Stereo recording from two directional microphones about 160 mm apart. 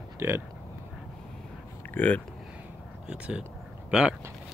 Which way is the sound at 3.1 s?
5° right (ahead or behind).